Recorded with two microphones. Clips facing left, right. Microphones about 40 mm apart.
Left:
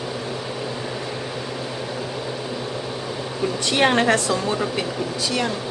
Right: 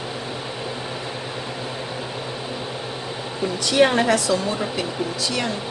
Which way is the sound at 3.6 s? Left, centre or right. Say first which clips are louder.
Right 1 dB; left.